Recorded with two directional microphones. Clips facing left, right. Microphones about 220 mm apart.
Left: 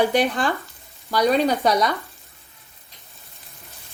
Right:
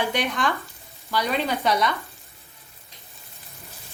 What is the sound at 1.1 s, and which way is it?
Speech, 40° left (ahead or behind).